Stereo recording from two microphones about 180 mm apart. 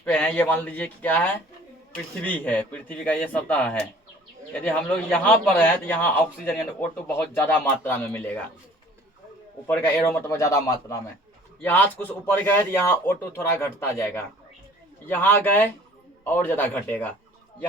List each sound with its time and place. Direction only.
0.0 s a man's voice: 5° left (ahead or behind)
9.6 s a man's voice: 10° left (ahead or behind)